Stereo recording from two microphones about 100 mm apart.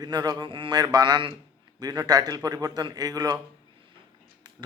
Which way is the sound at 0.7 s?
45° right (ahead or behind).